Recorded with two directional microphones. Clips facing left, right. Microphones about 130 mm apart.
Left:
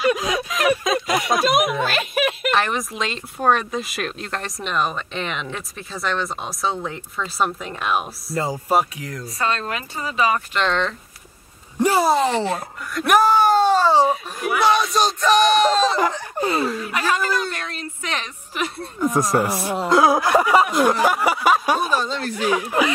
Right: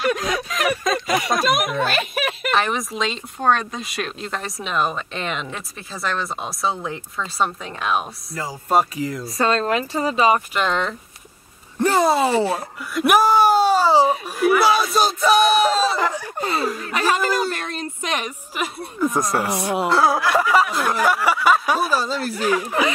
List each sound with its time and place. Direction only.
0.0 s speech: centre (ahead or behind)
9.4 s speech: 35° right (ahead or behind)
10.5 s speech: 10° right (ahead or behind)
11.8 s a sound: 10° left (ahead or behind)
12.1 s speech: 10° right (ahead or behind)
16.3 s a sound: 20° left (ahead or behind)
16.9 s speech: 30° right (ahead or behind)
18.0 s speech: 15° right (ahead or behind)
19.0 s speech: centre (ahead or behind)
19.9 s speech: 15° left (ahead or behind)
20.7 s a sound: 15° left (ahead or behind)
21.7 s speech: 5° right (ahead or behind)